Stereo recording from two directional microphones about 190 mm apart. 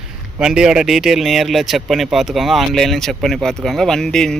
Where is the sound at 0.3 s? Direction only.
5° right (ahead or behind).